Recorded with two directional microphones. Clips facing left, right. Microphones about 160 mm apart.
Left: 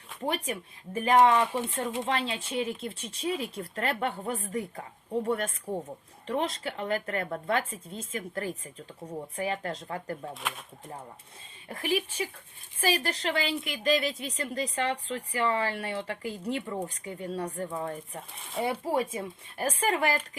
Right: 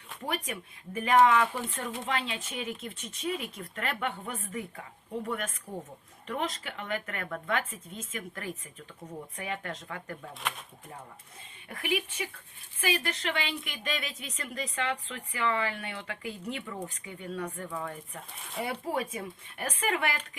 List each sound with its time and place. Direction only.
0.9 s a woman's voice: 35° left (ahead or behind)
11.7 s a woman's voice: 35° left (ahead or behind)